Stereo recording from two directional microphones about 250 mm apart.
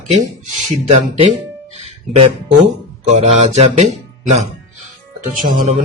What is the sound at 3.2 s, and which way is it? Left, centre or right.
Speech, right.